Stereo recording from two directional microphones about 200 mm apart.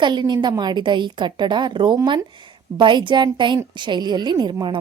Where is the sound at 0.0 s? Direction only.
20° right (ahead or behind).